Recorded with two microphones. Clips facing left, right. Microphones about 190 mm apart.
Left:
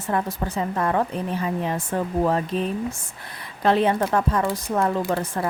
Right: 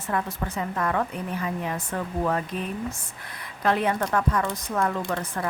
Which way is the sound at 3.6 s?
30° left (ahead or behind).